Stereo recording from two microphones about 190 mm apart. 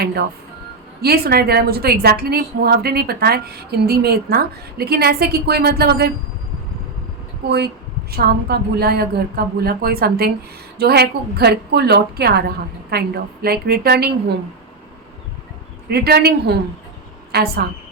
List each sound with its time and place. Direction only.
0.0 s a woman's voice: 55° right (ahead or behind)
8.1 s a woman's voice: 55° right (ahead or behind)
15.9 s a woman's voice: 55° right (ahead or behind)